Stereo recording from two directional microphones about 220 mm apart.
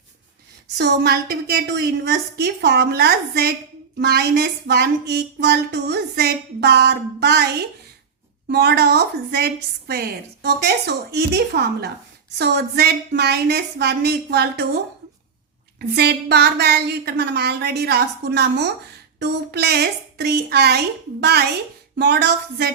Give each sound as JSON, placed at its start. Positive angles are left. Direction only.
{"t": 0.8, "sound": "a woman's voice", "side_deg": -50}
{"t": 16.0, "sound": "a woman's voice", "side_deg": -50}